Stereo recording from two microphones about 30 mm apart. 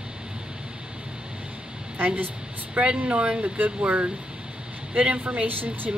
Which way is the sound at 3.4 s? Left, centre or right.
Right.